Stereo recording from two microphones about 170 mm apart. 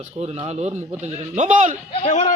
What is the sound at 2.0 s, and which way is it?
Speech, 45° left (ahead or behind).